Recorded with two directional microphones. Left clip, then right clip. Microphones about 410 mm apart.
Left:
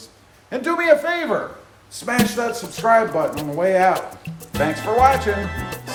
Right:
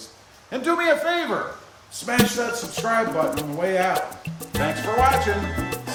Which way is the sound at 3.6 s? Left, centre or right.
Centre.